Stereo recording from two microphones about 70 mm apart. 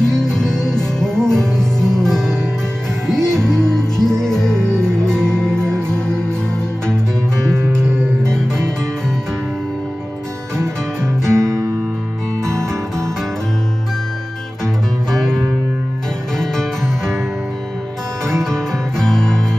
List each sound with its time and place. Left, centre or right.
0.0 s music: centre
7.8 s music: right
11.3 s guitar: right
12.4 s music: right
15.0 s music: centre
18.3 s music: centre